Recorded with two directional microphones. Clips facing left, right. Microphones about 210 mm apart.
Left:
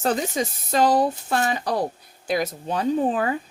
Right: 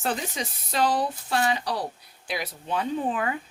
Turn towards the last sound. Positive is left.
turn(degrees=35)  # may be behind; listen again after turning